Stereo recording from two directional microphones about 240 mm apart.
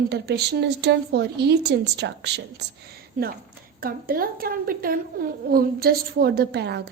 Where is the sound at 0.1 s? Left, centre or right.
Right.